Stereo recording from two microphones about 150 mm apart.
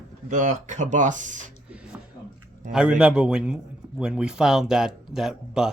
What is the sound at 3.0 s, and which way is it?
A man's voice, 5° right (ahead or behind).